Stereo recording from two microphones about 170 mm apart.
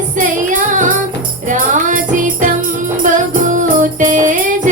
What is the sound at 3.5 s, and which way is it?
Music, 50° right (ahead or behind).